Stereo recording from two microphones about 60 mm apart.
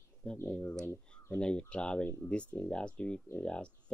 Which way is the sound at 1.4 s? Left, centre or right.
Centre.